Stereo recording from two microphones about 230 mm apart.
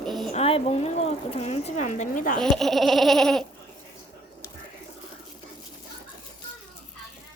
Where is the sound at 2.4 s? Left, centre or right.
Centre.